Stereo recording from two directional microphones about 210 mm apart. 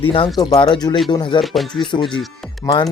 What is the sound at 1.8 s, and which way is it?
Speech, 20° left (ahead or behind).